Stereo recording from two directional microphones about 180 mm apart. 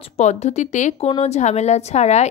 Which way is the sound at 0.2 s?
40° left (ahead or behind).